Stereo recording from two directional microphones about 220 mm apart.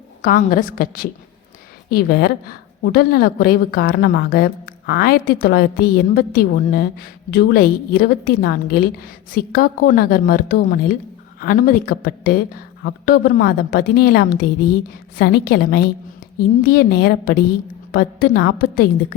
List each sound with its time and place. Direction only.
0.2 s a woman's voice: 40° left (ahead or behind)